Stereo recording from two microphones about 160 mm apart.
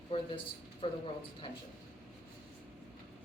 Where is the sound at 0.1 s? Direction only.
30° left (ahead or behind).